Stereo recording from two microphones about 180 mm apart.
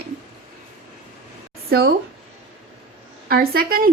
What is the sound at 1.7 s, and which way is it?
Speech, 65° right (ahead or behind).